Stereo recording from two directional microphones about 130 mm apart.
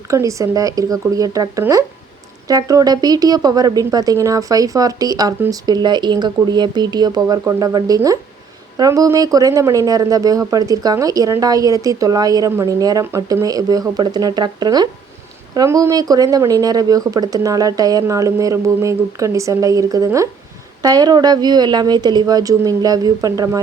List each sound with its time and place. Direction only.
0.1 s a woman's voice: 25° right (ahead or behind)